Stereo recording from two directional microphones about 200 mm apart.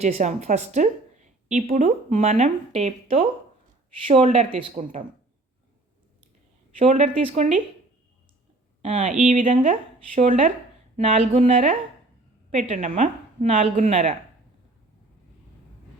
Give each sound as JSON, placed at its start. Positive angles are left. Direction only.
{"t": 0.0, "sound": "a woman's voice", "side_deg": -35}
{"t": 6.7, "sound": "a woman's voice", "side_deg": -35}
{"t": 8.8, "sound": "a woman's voice", "side_deg": -35}